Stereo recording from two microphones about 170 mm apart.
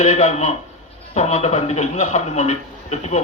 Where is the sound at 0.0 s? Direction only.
45° left (ahead or behind).